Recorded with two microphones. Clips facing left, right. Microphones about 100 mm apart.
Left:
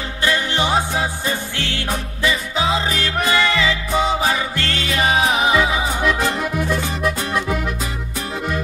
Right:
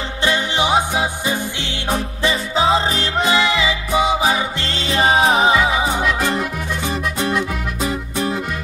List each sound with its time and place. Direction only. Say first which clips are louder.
0.2 s music: right 1 dB; 20° right (ahead or behind)